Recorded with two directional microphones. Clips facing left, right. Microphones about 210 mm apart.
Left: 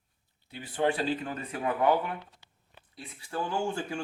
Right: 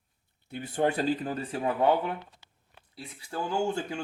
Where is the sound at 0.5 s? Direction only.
45° right (ahead or behind).